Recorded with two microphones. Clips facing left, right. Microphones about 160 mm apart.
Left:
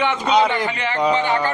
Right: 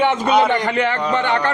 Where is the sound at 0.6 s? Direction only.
55° right (ahead or behind).